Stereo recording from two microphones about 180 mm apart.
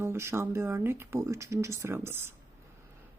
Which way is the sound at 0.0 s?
15° right (ahead or behind).